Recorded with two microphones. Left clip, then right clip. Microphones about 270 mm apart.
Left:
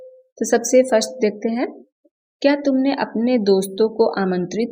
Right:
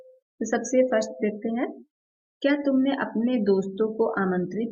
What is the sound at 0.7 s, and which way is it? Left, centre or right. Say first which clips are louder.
A woman's voice: left 6 dB; left.